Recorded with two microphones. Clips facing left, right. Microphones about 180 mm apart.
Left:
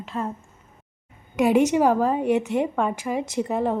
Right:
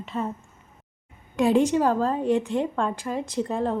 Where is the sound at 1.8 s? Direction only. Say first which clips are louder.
Left 3 dB; 10° left (ahead or behind).